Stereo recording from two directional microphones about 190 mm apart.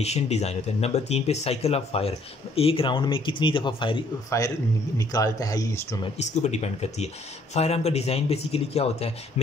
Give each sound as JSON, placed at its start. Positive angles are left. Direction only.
{"t": 0.0, "sound": "speech", "side_deg": 35}
{"t": 6.2, "sound": "speech", "side_deg": 35}